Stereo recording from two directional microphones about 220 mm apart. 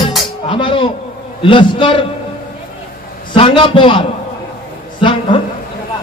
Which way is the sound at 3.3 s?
25° left (ahead or behind).